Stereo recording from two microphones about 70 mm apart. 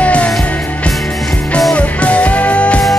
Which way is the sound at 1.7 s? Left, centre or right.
Centre.